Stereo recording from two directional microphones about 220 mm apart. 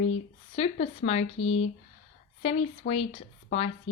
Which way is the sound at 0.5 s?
30° left (ahead or behind).